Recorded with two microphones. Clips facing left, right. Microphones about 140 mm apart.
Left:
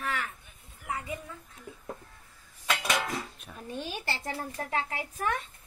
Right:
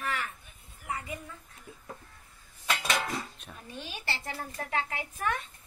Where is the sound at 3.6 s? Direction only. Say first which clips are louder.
Left 4 dB; 45° left (ahead or behind).